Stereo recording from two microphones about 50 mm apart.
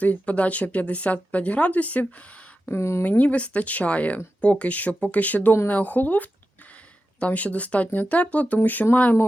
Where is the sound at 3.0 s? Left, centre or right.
Left.